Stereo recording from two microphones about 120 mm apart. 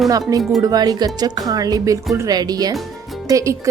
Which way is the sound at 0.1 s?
30° right (ahead or behind).